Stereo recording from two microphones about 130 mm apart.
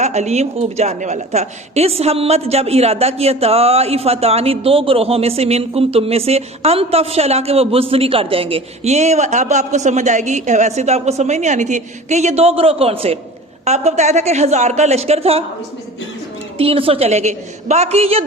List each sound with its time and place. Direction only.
0.0 s a woman's voice: 60° right (ahead or behind)
13.7 s speech: 60° right (ahead or behind)
16.6 s a woman's voice: 45° right (ahead or behind)